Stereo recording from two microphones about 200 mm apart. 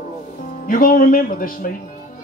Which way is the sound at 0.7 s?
45° left (ahead or behind).